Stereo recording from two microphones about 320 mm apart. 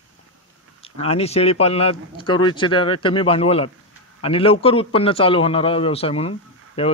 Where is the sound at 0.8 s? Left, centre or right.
Centre.